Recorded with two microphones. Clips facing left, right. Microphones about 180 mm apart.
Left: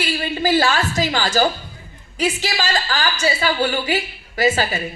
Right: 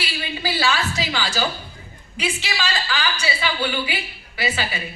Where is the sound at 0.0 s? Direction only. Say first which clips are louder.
Left 7 dB; 50° left (ahead or behind).